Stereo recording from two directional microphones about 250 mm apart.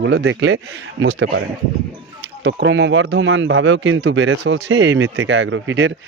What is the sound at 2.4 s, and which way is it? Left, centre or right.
Speech, right.